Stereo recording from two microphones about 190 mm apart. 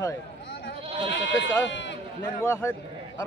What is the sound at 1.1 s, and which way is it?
Speech, 70° left (ahead or behind).